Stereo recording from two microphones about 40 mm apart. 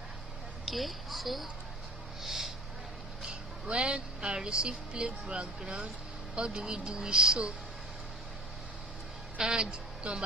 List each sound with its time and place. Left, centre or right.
0.7 s a woman's voice: centre
2.2 s a sound: centre
3.3 s speech: right
6.3 s a woman's voice: right
9.4 s speech: right